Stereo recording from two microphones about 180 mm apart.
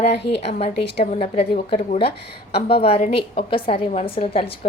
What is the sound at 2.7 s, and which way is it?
A woman's voice, 30° left (ahead or behind).